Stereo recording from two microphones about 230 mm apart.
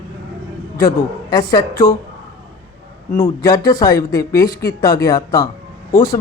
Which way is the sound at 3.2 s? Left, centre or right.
Centre.